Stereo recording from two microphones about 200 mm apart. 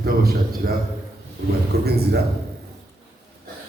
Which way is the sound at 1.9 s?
50° right (ahead or behind).